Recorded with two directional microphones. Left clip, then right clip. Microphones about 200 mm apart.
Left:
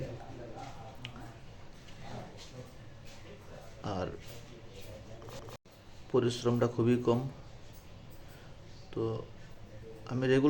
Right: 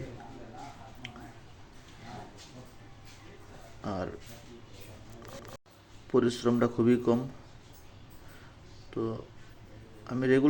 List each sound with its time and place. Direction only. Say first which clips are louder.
3.8 s music: right 1 dB; 10° right (ahead or behind)
6.1 s a man's voice: right 3 dB; 20° right (ahead or behind)
8.9 s speech: right 1 dB; 15° right (ahead or behind)